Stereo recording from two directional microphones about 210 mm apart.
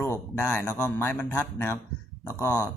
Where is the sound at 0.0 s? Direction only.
10° left (ahead or behind).